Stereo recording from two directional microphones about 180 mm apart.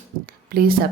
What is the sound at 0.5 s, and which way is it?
Speech, 55° right (ahead or behind).